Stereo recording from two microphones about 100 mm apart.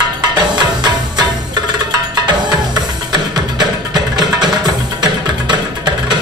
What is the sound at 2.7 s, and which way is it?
Music, 45° right (ahead or behind).